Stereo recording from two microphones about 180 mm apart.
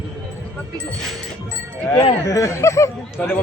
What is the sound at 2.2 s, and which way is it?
Speech, 15° left (ahead or behind).